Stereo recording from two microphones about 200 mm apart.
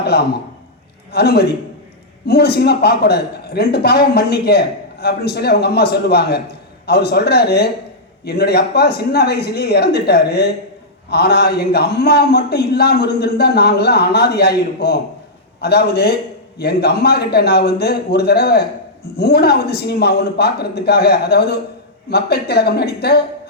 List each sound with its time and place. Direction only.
0.1 s a man's voice: 55° left (ahead or behind)